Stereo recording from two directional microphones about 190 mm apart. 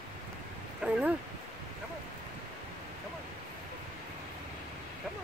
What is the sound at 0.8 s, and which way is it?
Speech, 5° right (ahead or behind).